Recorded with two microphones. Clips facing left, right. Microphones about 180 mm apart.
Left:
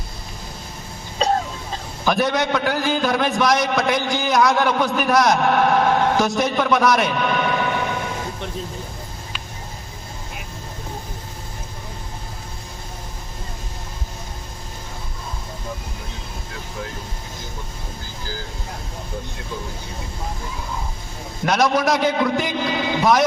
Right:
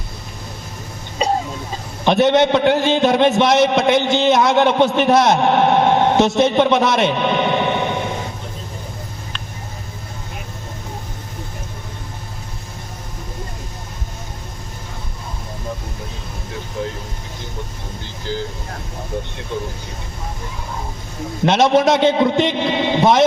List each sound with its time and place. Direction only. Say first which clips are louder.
2.0 s a man's voice: right 6 dB; 25° right (ahead or behind)
21.4 s a man's voice: right 5 dB; 25° right (ahead or behind)